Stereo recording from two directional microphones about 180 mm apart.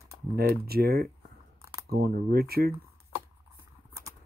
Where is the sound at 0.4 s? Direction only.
60° right (ahead or behind).